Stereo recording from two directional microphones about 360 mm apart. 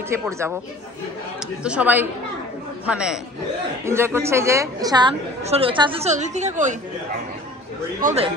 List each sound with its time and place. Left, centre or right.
0.1 s a woman's voice: centre
1.6 s a woman's voice: centre
8.0 s speech: right